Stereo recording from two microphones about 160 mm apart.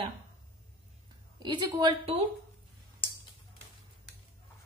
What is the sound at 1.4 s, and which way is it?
Speech, 25° right (ahead or behind).